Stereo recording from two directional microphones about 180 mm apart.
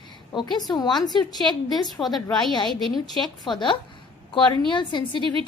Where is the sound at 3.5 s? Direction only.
25° left (ahead or behind).